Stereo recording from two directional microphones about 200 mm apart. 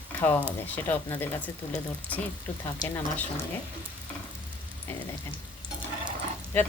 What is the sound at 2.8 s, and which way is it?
Speech, 15° left (ahead or behind).